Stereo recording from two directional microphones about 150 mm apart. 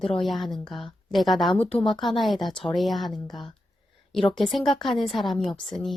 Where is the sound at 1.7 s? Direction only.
40° left (ahead or behind).